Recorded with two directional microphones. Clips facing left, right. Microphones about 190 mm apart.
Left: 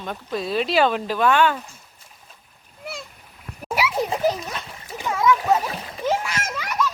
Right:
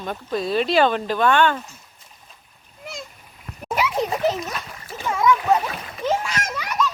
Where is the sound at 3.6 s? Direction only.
10° left (ahead or behind).